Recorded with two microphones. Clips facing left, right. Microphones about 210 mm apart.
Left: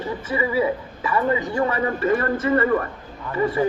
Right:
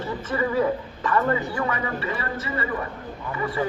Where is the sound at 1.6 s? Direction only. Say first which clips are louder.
Left 5 dB; 30° left (ahead or behind).